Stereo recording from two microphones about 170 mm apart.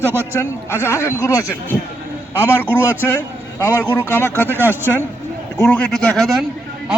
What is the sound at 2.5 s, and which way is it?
Speech, 10° right (ahead or behind).